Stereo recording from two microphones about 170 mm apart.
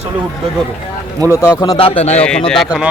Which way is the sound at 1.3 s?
20° left (ahead or behind).